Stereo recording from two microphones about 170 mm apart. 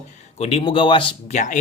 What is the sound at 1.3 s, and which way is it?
Speech, 45° left (ahead or behind).